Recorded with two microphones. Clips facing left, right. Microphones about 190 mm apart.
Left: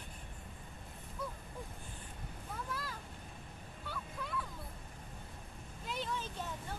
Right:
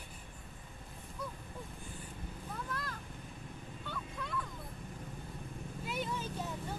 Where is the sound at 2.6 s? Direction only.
5° left (ahead or behind).